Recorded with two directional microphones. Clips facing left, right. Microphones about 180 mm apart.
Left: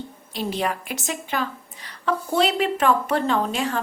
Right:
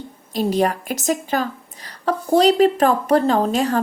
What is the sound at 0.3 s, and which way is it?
A woman's voice, 40° right (ahead or behind).